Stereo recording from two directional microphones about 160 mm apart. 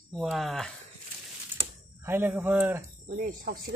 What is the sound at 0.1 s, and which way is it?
Speech, centre (ahead or behind).